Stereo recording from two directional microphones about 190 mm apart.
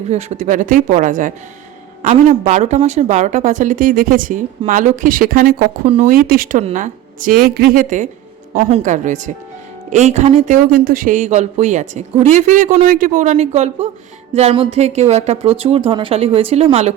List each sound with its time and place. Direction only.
0.1 s speech: 35° right (ahead or behind)